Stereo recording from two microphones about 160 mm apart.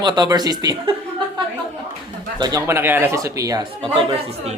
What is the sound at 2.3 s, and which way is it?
Speech, 25° right (ahead or behind).